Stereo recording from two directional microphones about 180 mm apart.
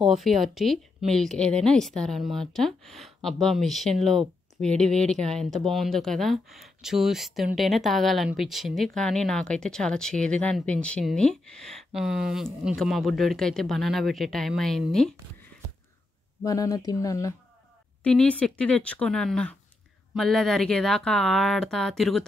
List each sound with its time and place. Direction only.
0.0 s speech: centre (ahead or behind)
16.4 s a woman's voice: 20° left (ahead or behind)
18.0 s a woman's voice: 5° left (ahead or behind)